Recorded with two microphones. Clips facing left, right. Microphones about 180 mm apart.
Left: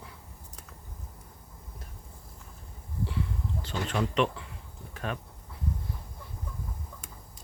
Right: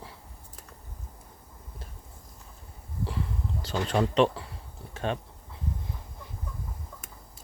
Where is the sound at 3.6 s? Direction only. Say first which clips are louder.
Right 5 dB; 35° right (ahead or behind).